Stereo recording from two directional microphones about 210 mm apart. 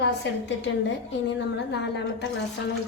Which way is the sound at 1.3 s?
55° left (ahead or behind).